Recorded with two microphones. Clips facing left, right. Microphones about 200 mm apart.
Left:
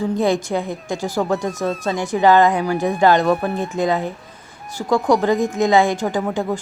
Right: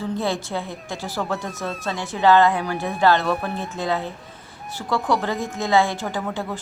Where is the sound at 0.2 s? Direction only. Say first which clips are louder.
Left 7 dB; 15° left (ahead or behind).